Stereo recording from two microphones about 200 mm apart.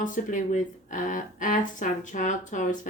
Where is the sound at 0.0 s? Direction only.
40° left (ahead or behind).